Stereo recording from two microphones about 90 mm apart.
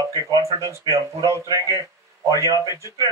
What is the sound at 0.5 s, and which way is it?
Speech, 60° right (ahead or behind).